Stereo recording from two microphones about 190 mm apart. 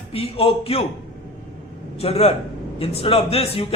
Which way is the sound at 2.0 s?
30° left (ahead or behind).